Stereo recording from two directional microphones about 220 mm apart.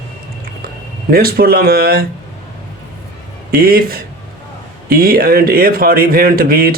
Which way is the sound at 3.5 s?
40° right (ahead or behind).